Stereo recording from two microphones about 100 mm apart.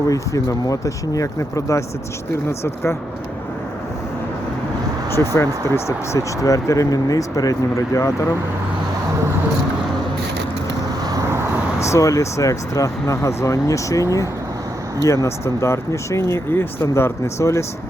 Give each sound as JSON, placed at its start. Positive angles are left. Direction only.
{"t": 0.1, "sound": "speech", "side_deg": 35}
{"t": 5.1, "sound": "speech", "side_deg": 25}
{"t": 11.0, "sound": "vehicle", "side_deg": -40}
{"t": 11.8, "sound": "speech", "side_deg": 30}